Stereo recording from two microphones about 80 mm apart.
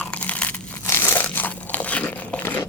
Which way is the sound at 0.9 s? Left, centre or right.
Left.